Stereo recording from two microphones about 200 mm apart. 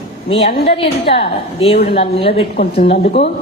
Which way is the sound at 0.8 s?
30° left (ahead or behind).